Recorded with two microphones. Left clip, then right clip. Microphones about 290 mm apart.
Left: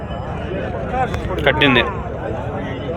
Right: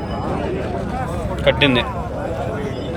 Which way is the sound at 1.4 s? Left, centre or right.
Centre.